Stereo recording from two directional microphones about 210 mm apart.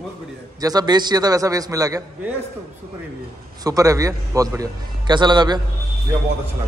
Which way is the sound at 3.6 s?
15° right (ahead or behind).